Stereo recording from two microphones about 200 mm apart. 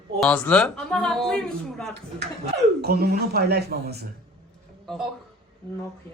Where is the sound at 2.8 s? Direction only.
50° right (ahead or behind).